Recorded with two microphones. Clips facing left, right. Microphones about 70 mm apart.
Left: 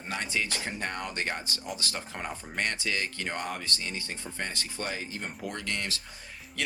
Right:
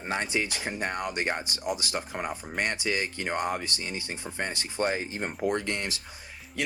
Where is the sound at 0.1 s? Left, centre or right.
Right.